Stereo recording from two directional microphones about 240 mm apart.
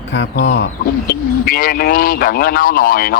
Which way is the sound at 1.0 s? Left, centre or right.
Left.